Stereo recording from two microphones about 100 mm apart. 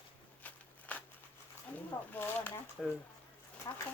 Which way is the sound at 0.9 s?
15° left (ahead or behind).